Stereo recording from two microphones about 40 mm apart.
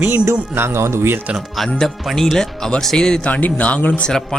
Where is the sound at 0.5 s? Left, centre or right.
Right.